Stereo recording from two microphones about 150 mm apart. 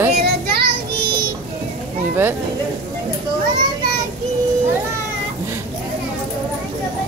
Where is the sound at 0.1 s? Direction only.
90° right.